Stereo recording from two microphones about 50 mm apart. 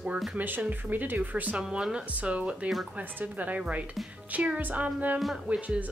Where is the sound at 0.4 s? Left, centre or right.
Right.